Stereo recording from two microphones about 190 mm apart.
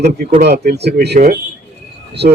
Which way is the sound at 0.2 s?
55° right (ahead or behind).